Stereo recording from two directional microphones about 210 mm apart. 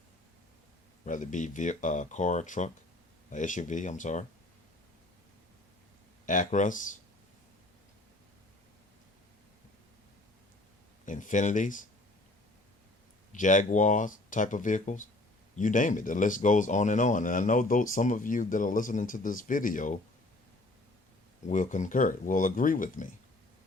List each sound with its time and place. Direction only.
1.0 s speech: 35° left (ahead or behind)
6.2 s speech: 35° left (ahead or behind)
11.0 s speech: 35° left (ahead or behind)
13.3 s speech: 35° left (ahead or behind)
21.5 s speech: 35° left (ahead or behind)